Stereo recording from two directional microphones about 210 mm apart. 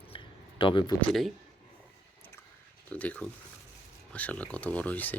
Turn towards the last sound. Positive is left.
turn(degrees=5)  # may be behind; listen again after turning